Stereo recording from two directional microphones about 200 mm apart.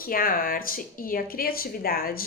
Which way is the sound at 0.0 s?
45° left (ahead or behind).